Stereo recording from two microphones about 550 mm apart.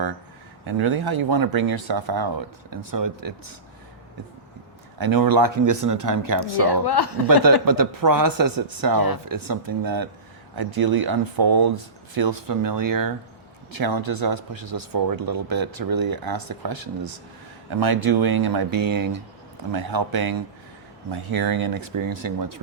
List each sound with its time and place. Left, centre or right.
0.7 s speech: right
1.2 s speech: right
4.9 s speech: right
6.8 s speech: left
7.4 s speech: right
21.1 s speech: right
21.8 s speech: right